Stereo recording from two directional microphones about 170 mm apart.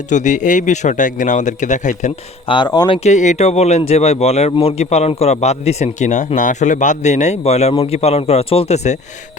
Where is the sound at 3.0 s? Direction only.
45° left (ahead or behind).